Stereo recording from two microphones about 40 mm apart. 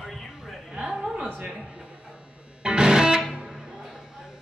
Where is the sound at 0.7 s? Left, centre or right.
Centre.